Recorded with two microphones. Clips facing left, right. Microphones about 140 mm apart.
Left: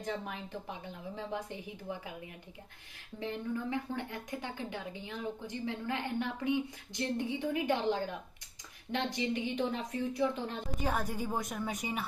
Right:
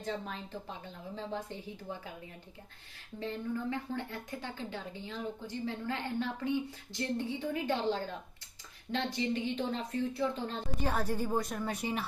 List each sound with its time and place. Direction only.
0.0 s a woman's voice: 15° left (ahead or behind)
3.2 s a woman's voice: 15° left (ahead or behind)
9.1 s a woman's voice: 15° left (ahead or behind)
10.8 s a woman's voice: 5° left (ahead or behind)